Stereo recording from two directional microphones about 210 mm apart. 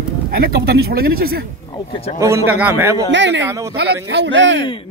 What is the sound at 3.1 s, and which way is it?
Speech, 60° right (ahead or behind).